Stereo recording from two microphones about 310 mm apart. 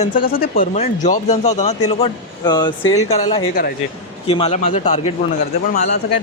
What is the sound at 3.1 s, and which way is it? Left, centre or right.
A man's voice, centre.